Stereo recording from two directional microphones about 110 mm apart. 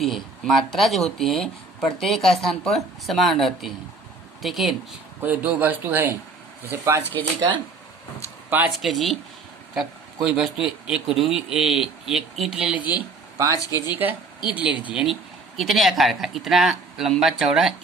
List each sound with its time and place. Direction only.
0.0 s a man's voice: centre (ahead or behind)
5.2 s speech: 15° right (ahead or behind)
8.4 s speech: 15° right (ahead or behind)
8.7 s a man's voice: centre (ahead or behind)
13.4 s speech: 25° right (ahead or behind)
13.8 s speech: 15° right (ahead or behind)
14.9 s a man's voice: 5° right (ahead or behind)